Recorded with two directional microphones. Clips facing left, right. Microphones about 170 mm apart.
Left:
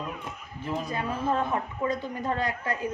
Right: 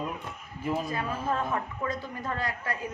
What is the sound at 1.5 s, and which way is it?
A woman's voice, 20° left (ahead or behind).